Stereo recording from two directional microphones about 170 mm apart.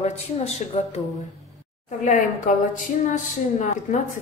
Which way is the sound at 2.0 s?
50° left (ahead or behind).